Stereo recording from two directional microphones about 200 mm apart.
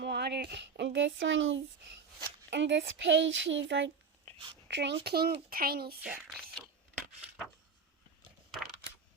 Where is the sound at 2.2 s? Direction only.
60° right (ahead or behind).